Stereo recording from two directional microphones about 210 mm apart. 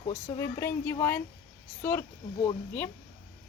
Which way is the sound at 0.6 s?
10° left (ahead or behind).